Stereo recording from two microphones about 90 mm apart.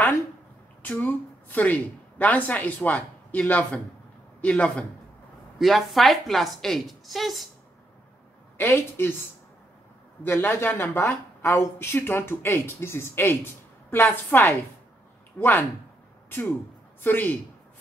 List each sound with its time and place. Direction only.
0.8 s a woman's voice: 20° left (ahead or behind)
5.6 s a woman's voice: centre (ahead or behind)
8.5 s speech: 25° left (ahead or behind)
10.2 s speech: 25° left (ahead or behind)